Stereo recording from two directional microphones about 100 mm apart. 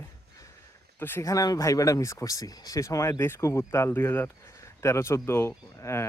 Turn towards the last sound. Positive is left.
turn(degrees=30)  # may be behind; listen again after turning